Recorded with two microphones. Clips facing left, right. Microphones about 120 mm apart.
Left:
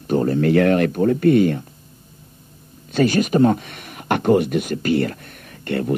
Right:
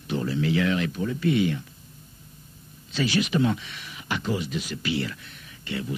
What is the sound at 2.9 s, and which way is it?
Speech, 50° left (ahead or behind).